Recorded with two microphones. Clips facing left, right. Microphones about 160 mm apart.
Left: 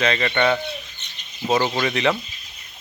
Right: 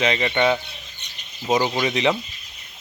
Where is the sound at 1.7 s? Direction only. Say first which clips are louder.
Even; 15° right (ahead or behind).